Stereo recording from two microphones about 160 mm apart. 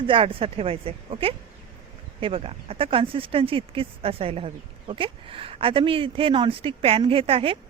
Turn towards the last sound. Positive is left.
turn(degrees=-35)  # may be behind; listen again after turning